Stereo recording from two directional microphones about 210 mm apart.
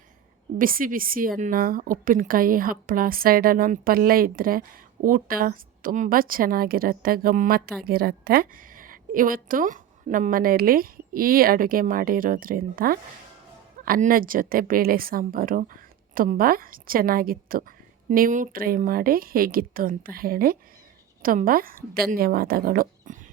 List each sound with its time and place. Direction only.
0.6 s a woman's voice: 40° right (ahead or behind)